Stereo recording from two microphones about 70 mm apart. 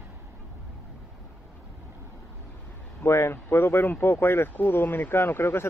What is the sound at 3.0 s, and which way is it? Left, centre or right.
Speech, left.